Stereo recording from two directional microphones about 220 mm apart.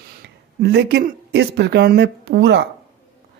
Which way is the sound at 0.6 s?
45° right (ahead or behind).